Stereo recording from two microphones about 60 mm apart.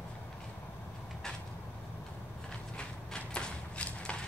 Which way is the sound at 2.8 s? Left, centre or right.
Centre.